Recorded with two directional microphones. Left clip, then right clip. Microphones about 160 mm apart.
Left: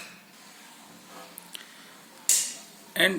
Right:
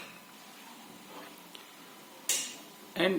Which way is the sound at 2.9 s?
5° right (ahead or behind).